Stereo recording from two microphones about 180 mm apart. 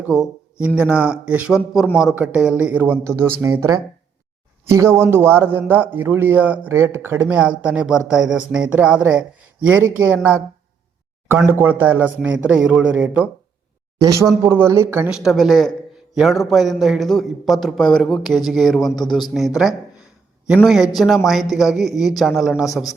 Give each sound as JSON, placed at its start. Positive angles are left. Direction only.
{"t": 0.0, "sound": "a man's voice", "side_deg": -5}
{"t": 11.4, "sound": "a man's voice", "side_deg": -10}
{"t": 14.0, "sound": "a man's voice", "side_deg": -20}